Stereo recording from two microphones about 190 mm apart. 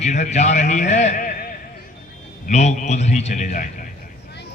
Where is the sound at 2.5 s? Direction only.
35° left (ahead or behind).